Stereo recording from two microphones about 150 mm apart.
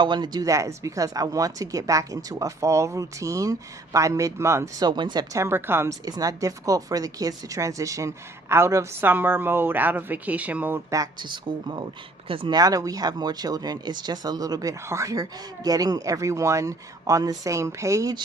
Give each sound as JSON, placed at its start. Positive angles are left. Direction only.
{"t": 0.0, "sound": "speech", "side_deg": -30}